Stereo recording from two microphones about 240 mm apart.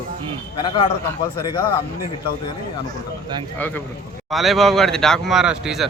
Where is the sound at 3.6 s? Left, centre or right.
Centre.